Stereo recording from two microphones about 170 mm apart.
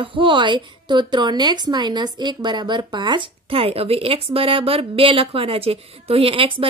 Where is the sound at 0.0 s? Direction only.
30° right (ahead or behind).